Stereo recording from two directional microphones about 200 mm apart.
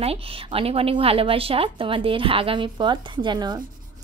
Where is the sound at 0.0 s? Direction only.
30° right (ahead or behind).